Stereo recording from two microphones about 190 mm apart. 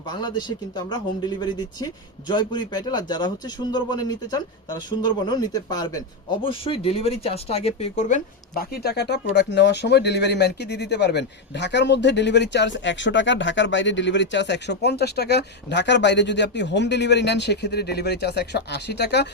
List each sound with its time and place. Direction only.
0.1 s a man's voice: 25° left (ahead or behind)
8.5 s speech: 55° left (ahead or behind)